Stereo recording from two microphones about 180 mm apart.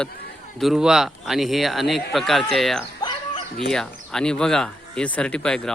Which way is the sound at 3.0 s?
25° left (ahead or behind).